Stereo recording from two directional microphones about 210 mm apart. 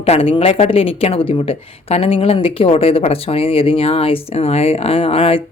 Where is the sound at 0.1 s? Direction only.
25° left (ahead or behind).